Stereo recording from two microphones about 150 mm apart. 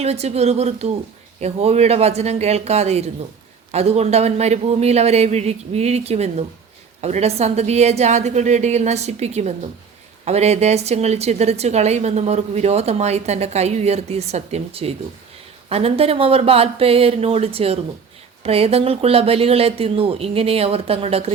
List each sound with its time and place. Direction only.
0.0 s a woman's voice: 45° right (ahead or behind)